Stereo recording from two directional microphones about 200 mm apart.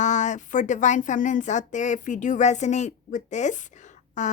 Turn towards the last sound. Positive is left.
turn(degrees=40)  # may be behind; listen again after turning